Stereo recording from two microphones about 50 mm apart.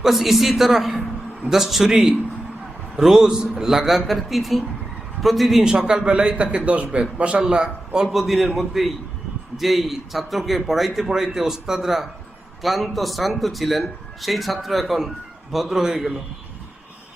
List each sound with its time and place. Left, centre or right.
0.0 s a man's voice: centre
5.6 s a man's voice: centre
8.1 s a man's voice: centre